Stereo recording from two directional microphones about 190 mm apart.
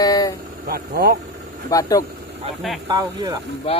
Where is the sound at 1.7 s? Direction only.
20° left (ahead or behind).